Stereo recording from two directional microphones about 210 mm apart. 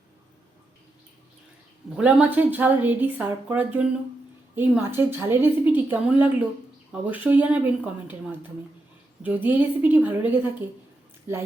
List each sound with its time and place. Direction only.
2.0 s a woman's voice: 5° right (ahead or behind)